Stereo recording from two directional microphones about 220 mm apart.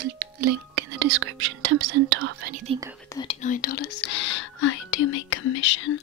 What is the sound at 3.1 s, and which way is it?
Speech, 15° left (ahead or behind).